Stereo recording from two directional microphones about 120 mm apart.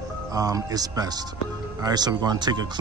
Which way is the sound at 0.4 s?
30° right (ahead or behind).